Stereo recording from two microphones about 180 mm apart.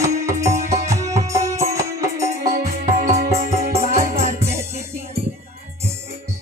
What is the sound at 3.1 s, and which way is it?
Music, 50° right (ahead or behind).